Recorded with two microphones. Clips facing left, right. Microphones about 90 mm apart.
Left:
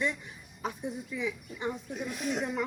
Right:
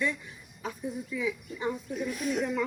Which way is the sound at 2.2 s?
25° left (ahead or behind).